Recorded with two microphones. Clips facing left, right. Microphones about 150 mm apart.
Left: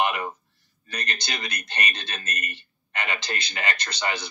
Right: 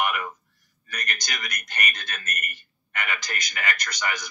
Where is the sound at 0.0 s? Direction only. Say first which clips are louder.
Left 2 dB; 30° left (ahead or behind).